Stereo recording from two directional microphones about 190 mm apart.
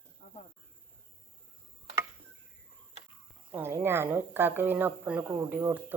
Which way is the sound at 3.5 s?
10° right (ahead or behind).